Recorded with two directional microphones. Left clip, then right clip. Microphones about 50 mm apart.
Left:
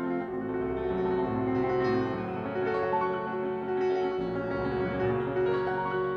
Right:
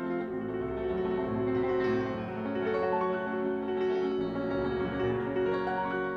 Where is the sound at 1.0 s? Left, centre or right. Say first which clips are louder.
Left 2 dB; centre.